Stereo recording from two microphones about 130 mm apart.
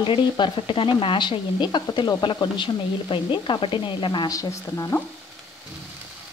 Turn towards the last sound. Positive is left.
turn(degrees=25)  # may be behind; listen again after turning